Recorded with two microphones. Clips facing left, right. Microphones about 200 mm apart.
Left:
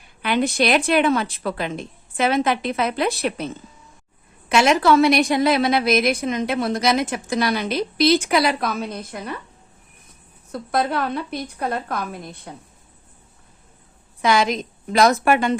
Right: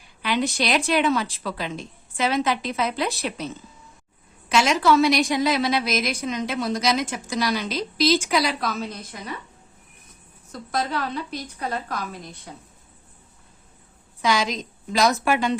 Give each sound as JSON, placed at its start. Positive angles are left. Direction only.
{"t": 0.2, "sound": "a woman's voice", "side_deg": 55}
{"t": 10.5, "sound": "a woman's voice", "side_deg": 60}
{"t": 14.2, "sound": "a woman's voice", "side_deg": 55}